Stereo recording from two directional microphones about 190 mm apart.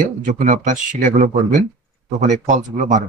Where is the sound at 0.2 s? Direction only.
40° right (ahead or behind).